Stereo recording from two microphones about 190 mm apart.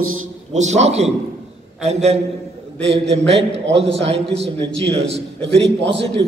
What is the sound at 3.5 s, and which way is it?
A man's voice, 70° right (ahead or behind).